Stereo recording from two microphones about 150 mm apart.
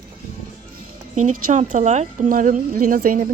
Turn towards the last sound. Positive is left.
turn(degrees=-65)  # may be behind; listen again after turning